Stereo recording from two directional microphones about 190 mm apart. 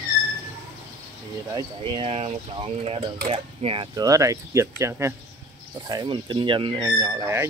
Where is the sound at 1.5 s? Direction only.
30° right (ahead or behind).